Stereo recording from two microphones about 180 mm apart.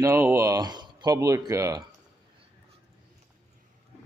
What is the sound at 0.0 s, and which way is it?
Speech, 15° right (ahead or behind).